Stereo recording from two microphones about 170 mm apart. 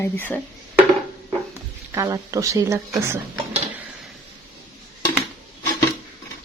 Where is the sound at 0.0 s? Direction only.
10° left (ahead or behind).